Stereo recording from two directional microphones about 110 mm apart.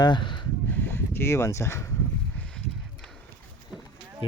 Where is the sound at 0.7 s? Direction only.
20° left (ahead or behind).